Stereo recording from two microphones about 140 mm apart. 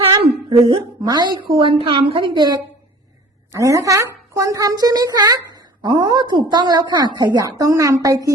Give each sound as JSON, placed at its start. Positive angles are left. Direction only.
{"t": 0.6, "sound": "a woman's voice", "side_deg": -30}